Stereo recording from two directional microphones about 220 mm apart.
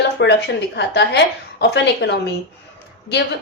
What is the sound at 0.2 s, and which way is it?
A woman's voice, 50° left (ahead or behind).